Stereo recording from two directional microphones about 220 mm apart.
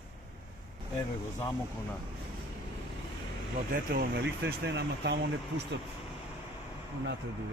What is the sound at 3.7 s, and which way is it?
Speech, 40° right (ahead or behind).